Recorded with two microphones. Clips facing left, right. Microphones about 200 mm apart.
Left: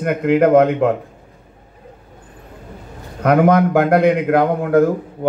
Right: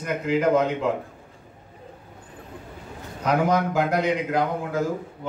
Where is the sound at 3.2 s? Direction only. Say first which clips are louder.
Left 9 dB; 60° left (ahead or behind).